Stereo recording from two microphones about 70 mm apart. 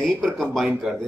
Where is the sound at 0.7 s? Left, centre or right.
Centre.